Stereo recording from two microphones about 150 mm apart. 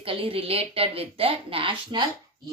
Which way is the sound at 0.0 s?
40° right (ahead or behind).